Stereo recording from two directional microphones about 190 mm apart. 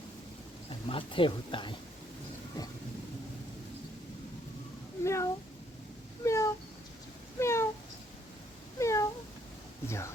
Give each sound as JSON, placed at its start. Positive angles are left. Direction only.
{"t": 0.9, "sound": "speech", "side_deg": 30}
{"t": 5.0, "sound": "speech", "side_deg": 15}
{"t": 6.2, "sound": "a sound", "side_deg": 15}
{"t": 8.8, "sound": "cat", "side_deg": 15}
{"t": 9.8, "sound": "speech", "side_deg": 15}